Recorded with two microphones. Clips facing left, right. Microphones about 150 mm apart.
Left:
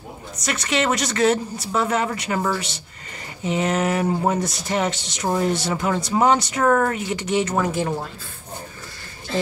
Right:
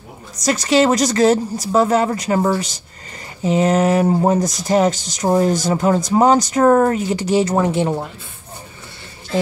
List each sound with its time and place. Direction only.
0.4 s speech: 35° right (ahead or behind)